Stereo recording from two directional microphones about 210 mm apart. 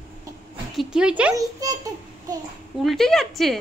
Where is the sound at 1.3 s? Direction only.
15° right (ahead or behind).